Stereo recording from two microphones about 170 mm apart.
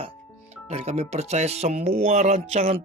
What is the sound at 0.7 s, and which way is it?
Speech, 40° right (ahead or behind).